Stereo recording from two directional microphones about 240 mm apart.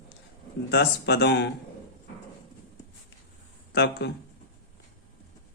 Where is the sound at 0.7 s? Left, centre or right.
Left.